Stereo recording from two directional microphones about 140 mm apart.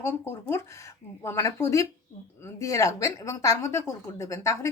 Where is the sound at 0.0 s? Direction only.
15° left (ahead or behind).